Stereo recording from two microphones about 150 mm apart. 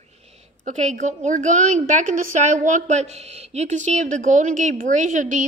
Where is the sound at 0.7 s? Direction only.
55° right (ahead or behind).